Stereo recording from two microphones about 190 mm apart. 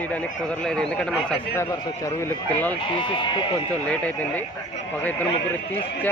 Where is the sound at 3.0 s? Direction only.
25° left (ahead or behind).